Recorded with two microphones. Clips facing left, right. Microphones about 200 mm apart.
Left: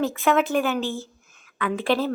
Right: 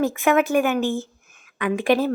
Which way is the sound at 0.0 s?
15° right (ahead or behind).